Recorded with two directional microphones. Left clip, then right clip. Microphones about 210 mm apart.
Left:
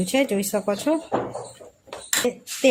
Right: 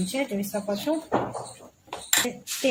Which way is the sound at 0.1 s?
50° left (ahead or behind).